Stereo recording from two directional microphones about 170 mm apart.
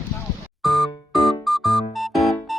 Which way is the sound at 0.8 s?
20° left (ahead or behind).